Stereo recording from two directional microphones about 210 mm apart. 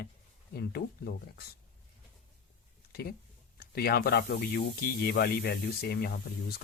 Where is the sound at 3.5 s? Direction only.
45° left (ahead or behind).